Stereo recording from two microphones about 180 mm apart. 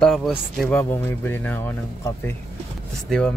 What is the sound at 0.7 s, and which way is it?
Speech, 15° left (ahead or behind).